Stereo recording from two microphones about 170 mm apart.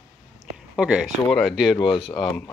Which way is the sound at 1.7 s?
30° left (ahead or behind).